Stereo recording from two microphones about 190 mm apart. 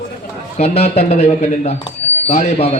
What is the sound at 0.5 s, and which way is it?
A man's voice, 35° left (ahead or behind).